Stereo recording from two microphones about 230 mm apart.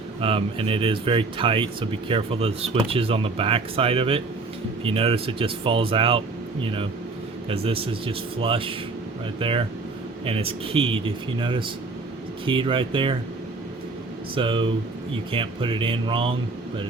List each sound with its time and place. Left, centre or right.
0.2 s speech: right
7.4 s speech: right
14.3 s speech: right